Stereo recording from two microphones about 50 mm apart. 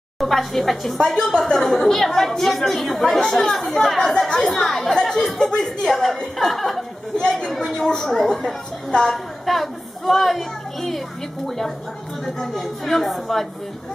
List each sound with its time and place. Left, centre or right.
0.2 s a woman's voice: centre
5.9 s a woman's voice: centre
7.2 s a woman's voice: centre